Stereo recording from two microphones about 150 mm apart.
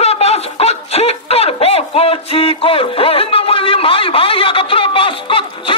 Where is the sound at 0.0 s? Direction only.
45° left (ahead or behind).